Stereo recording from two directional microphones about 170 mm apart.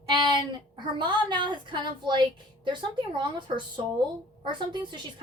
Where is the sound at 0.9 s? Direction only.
25° right (ahead or behind).